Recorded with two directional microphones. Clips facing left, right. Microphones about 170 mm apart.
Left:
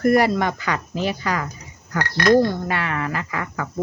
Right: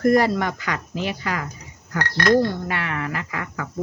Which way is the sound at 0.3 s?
20° left (ahead or behind).